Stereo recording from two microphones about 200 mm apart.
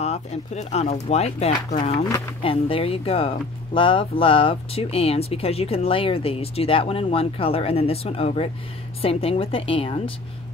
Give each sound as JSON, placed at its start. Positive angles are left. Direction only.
{"t": 0.0, "sound": "speech", "side_deg": 35}
{"t": 2.0, "sound": "speech", "side_deg": 20}